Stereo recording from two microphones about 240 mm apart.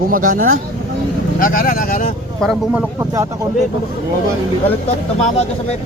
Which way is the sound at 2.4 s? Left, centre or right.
Centre.